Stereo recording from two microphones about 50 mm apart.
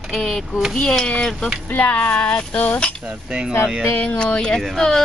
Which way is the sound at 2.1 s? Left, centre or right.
Left.